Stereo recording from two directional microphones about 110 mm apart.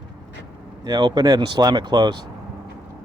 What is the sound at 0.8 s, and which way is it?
Speech, 40° right (ahead or behind).